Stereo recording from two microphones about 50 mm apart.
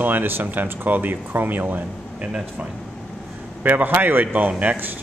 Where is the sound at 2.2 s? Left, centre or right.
Right.